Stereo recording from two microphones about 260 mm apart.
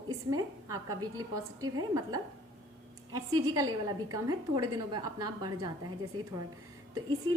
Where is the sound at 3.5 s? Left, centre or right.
Centre.